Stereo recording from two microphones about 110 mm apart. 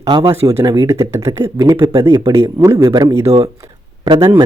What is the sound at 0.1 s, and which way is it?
A man's voice, 35° right (ahead or behind).